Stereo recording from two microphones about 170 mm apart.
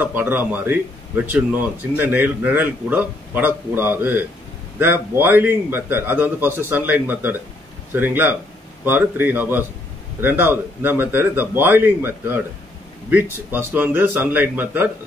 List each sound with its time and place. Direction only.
0.0 s speech: 10° right (ahead or behind)